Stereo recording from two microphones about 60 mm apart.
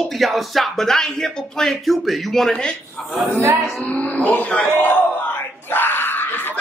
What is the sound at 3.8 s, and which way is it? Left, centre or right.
Speech, left.